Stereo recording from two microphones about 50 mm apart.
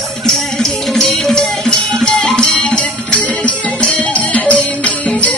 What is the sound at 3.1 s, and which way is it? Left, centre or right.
Music, left.